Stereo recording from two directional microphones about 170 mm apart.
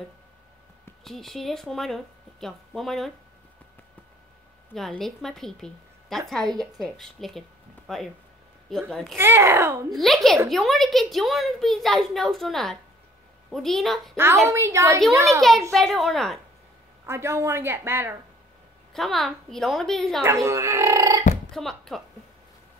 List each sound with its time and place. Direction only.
1.0 s a child's voice: centre (ahead or behind)
4.7 s a child's voice: centre (ahead or behind)
9.1 s speech: 15° right (ahead or behind)
9.8 s a child's voice: centre (ahead or behind)
14.1 s speech: 15° right (ahead or behind)
15.7 s a child's voice: centre (ahead or behind)
17.0 s speech: 15° right (ahead or behind)
18.9 s a child's voice: centre (ahead or behind)
20.2 s speech: 15° right (ahead or behind)
21.5 s speech: centre (ahead or behind)